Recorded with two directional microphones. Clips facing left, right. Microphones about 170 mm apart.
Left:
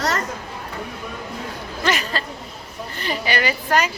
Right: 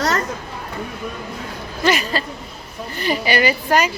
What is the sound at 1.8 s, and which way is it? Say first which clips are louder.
A woman's voice: right 4 dB; 10° right (ahead or behind).